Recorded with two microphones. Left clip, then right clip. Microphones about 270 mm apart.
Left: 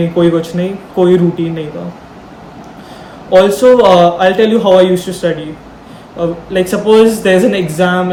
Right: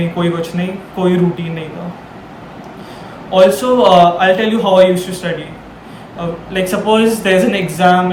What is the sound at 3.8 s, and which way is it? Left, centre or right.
Speech, centre.